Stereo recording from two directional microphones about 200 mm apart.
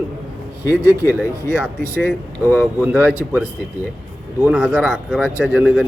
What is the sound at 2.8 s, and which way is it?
Speech, 5° right (ahead or behind).